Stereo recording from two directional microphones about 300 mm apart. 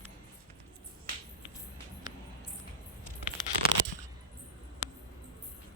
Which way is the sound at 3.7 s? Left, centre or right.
Right.